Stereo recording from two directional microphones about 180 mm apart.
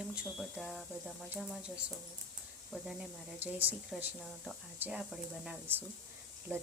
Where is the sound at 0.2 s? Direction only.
5° right (ahead or behind).